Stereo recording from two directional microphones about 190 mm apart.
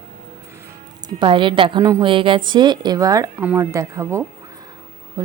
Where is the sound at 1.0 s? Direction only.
25° right (ahead or behind).